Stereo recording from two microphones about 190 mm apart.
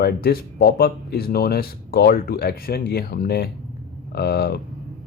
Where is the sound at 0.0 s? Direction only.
55° left (ahead or behind).